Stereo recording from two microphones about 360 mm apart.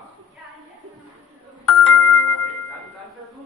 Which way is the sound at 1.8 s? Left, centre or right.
Left.